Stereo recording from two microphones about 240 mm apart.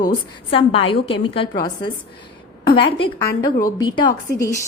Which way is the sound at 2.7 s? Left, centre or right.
Left.